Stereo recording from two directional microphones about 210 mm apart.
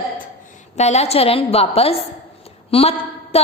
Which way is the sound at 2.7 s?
30° left (ahead or behind).